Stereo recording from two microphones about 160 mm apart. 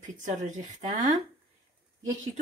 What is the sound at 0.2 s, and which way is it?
Speech, 50° right (ahead or behind).